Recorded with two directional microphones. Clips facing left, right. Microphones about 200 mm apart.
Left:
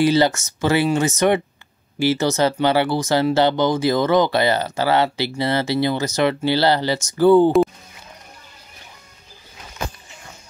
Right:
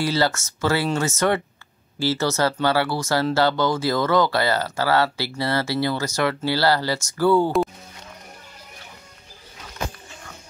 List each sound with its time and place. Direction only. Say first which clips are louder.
0.0 s speech: left 6 dB; 20° left (ahead or behind)